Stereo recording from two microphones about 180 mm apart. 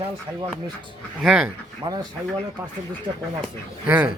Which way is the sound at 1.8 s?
25° right (ahead or behind).